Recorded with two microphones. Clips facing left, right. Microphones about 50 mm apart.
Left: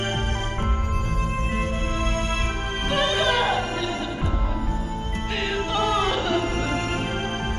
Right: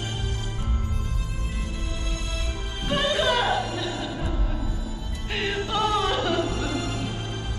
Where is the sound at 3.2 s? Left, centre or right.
Centre.